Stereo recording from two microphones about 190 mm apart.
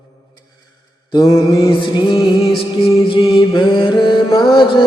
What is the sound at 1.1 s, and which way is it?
Mantra, 20° left (ahead or behind).